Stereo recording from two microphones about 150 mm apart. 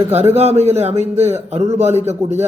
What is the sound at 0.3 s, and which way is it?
Speech, 45° right (ahead or behind).